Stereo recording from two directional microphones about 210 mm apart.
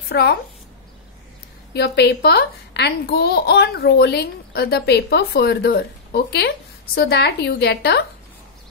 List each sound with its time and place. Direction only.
0.1 s a woman's voice: 50° left (ahead or behind)
1.7 s a child's voice: 55° left (ahead or behind)